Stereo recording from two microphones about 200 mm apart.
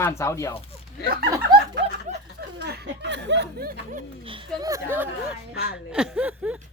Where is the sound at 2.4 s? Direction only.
55° right (ahead or behind).